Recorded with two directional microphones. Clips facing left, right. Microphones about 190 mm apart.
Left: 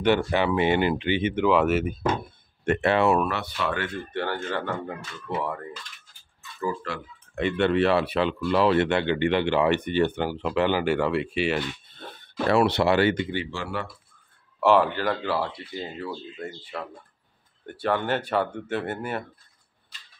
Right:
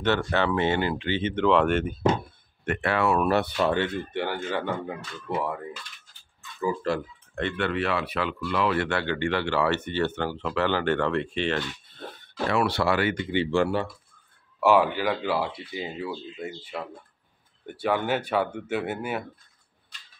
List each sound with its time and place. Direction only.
0.2 s speech: 10° left (ahead or behind)
2.6 s speech: 25° left (ahead or behind)
3.3 s speech: 40° right (ahead or behind)
3.8 s speech: 20° right (ahead or behind)
4.3 s speech: 10° right (ahead or behind)
6.8 s speech: 40° right (ahead or behind)
7.5 s speech: 25° left (ahead or behind)
8.8 s speech: 20° left (ahead or behind)
12.6 s speech: 20° left (ahead or behind)
13.5 s speech: 55° right (ahead or behind)
14.6 s speech: 5° right (ahead or behind)